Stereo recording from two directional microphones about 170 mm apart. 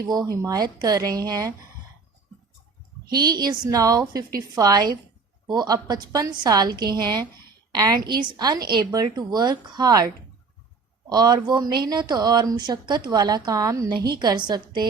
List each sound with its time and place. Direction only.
0.0 s speech: 25° right (ahead or behind)
3.2 s speech: 25° right (ahead or behind)
11.1 s speech: 25° right (ahead or behind)